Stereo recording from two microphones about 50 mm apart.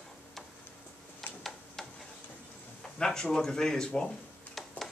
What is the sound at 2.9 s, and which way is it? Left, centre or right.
Speech, centre.